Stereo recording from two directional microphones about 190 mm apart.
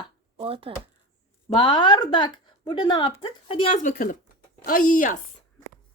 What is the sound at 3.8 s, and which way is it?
Speech, 45° left (ahead or behind).